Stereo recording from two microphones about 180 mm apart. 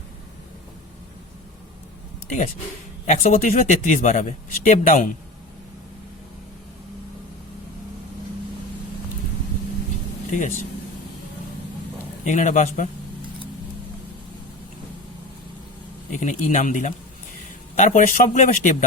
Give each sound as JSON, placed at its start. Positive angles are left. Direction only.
{"t": 3.1, "sound": "speech", "side_deg": 40}
{"t": 10.3, "sound": "speech", "side_deg": 45}
{"t": 12.2, "sound": "speech", "side_deg": 45}
{"t": 16.1, "sound": "speech", "side_deg": 45}